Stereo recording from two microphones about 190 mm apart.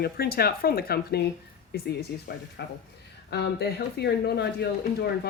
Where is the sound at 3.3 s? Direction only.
60° left (ahead or behind).